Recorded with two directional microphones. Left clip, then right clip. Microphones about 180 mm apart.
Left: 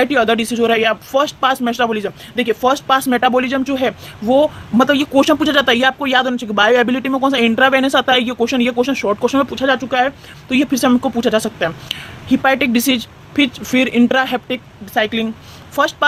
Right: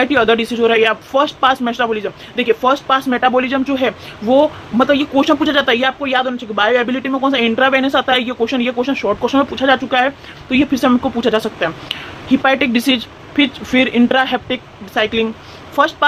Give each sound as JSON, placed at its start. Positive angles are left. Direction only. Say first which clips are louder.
{"t": 0.0, "sound": "speech", "louder": "right 1 dB", "side_deg": 35}